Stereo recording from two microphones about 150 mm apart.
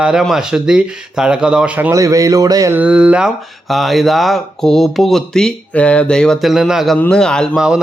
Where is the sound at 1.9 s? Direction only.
20° right (ahead or behind).